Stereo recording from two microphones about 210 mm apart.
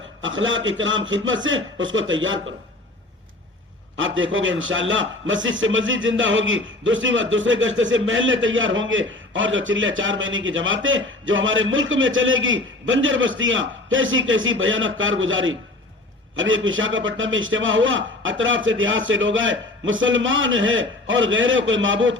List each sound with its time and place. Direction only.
0.2 s a man's voice: 65° right (ahead or behind)
3.9 s a man's voice: 65° right (ahead or behind)